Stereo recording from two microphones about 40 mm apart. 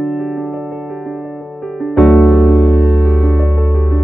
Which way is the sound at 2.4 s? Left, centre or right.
Left.